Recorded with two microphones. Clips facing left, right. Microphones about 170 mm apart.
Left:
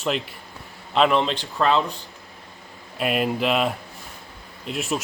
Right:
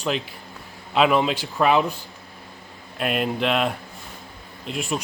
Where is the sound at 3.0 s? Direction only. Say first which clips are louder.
Left 1 dB; centre (ahead or behind).